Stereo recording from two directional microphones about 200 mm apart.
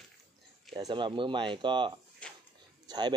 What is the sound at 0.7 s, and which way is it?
Speech, 20° right (ahead or behind).